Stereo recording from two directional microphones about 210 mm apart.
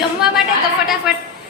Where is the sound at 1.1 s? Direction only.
Centre (ahead or behind).